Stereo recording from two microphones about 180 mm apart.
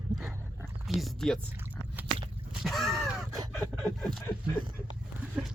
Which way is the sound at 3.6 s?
15° right (ahead or behind).